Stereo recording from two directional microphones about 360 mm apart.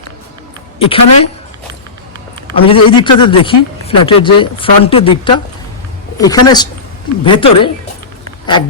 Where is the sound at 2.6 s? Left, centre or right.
Centre.